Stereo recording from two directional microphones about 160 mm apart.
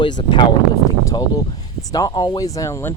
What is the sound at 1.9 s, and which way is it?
Speech, 25° left (ahead or behind).